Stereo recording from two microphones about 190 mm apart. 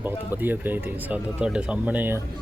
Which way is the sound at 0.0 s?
10° right (ahead or behind).